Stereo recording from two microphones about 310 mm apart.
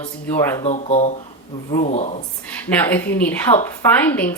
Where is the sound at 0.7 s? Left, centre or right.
Left.